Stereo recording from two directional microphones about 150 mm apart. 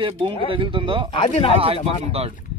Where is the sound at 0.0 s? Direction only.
35° right (ahead or behind).